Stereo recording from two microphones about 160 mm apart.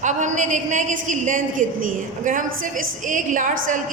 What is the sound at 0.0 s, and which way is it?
A woman's voice, 50° right (ahead or behind).